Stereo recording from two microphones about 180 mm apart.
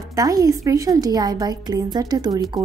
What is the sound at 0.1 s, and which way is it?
A woman's voice, 20° right (ahead or behind).